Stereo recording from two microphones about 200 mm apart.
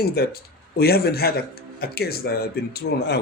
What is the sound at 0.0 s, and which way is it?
Speech, 50° left (ahead or behind).